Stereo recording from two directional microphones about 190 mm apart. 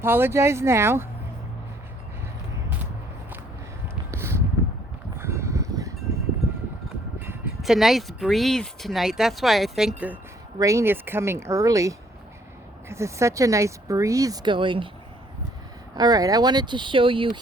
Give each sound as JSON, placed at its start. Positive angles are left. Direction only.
{"t": 0.0, "sound": "speech", "side_deg": -10}
{"t": 4.1, "sound": "a sound", "side_deg": -15}
{"t": 7.3, "sound": "speech", "side_deg": -5}
{"t": 10.6, "sound": "speech", "side_deg": -15}
{"t": 16.0, "sound": "speech", "side_deg": -20}